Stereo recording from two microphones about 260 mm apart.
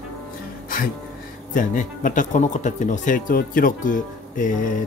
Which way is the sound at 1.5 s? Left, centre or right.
Left.